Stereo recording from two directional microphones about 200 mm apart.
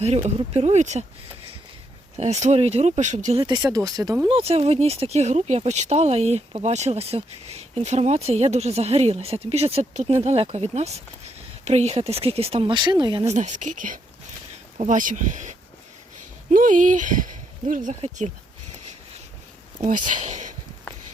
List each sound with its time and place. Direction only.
0.0 s speech: 35° right (ahead or behind)
2.1 s speech: 35° right (ahead or behind)
3.4 s speech: 20° right (ahead or behind)
4.4 s speech: 30° right (ahead or behind)
13.3 s speech: 35° right (ahead or behind)
19.8 s speech: 40° right (ahead or behind)
20.9 s walk: 10° left (ahead or behind)